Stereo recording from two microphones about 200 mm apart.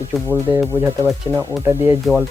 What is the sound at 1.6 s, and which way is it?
Speech, 15° right (ahead or behind).